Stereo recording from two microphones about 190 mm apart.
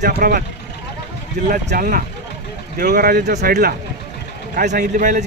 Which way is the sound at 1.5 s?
45° right (ahead or behind).